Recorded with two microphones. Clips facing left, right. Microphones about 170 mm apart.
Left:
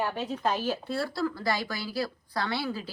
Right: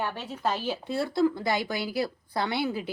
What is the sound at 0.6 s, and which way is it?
A woman's voice, 15° right (ahead or behind).